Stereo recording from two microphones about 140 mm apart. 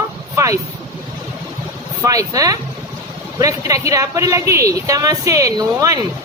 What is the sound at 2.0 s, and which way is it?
A woman's voice, 25° right (ahead or behind).